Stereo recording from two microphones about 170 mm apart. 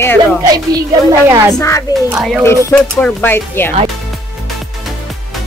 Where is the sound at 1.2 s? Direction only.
15° right (ahead or behind).